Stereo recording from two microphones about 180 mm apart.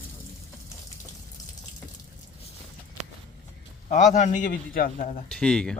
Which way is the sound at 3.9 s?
45° left (ahead or behind).